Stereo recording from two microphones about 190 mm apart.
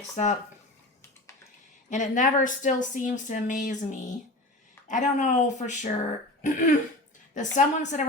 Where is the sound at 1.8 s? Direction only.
40° left (ahead or behind).